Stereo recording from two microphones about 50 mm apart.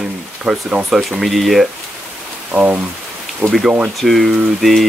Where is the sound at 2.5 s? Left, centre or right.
Right.